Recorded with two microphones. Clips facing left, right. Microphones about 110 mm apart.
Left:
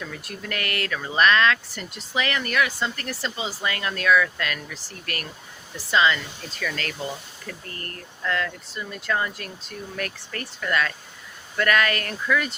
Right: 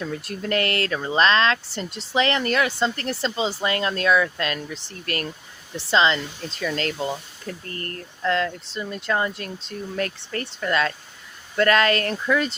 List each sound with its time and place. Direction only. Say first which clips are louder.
0.0 s speech: right 6 dB; 30° right (ahead or behind)